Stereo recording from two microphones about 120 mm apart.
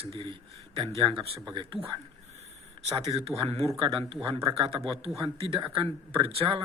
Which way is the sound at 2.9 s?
55° right (ahead or behind).